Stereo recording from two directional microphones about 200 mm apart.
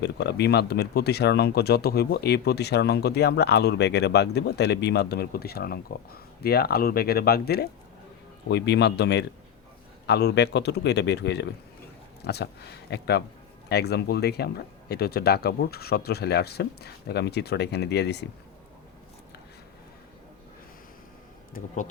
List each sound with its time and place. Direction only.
0.0 s speech: 55° left (ahead or behind)